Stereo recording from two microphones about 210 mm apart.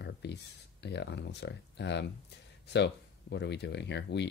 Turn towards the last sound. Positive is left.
turn(degrees=55)  # may be behind; listen again after turning